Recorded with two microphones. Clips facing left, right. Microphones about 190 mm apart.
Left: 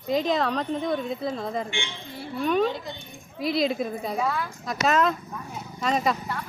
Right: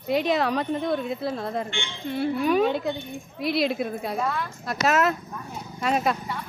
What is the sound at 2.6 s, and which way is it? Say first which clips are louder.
Speech: right 5 dB; 60° right (ahead or behind).